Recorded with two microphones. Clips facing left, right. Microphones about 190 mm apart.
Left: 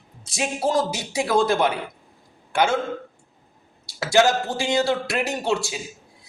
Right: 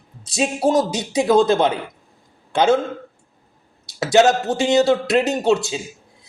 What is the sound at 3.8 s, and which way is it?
A man's voice, 20° right (ahead or behind).